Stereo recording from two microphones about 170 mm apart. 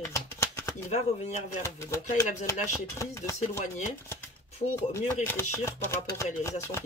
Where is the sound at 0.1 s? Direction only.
15° left (ahead or behind).